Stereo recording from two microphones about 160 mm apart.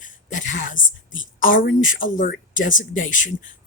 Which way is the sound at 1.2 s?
60° left (ahead or behind).